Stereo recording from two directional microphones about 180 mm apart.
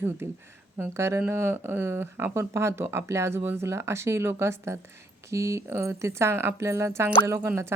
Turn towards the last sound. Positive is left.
turn(degrees=-15)  # may be behind; listen again after turning